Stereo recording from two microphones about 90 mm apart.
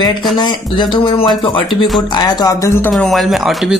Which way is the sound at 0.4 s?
60° left (ahead or behind).